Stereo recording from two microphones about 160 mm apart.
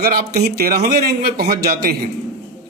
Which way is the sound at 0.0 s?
65° right (ahead or behind).